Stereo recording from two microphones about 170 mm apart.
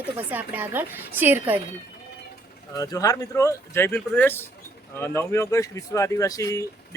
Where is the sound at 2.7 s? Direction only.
20° left (ahead or behind).